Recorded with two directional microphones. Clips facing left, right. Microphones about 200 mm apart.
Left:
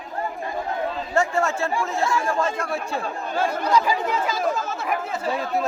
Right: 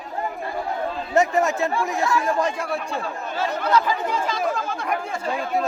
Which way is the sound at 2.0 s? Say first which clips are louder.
Right 1 dB; 25° left (ahead or behind).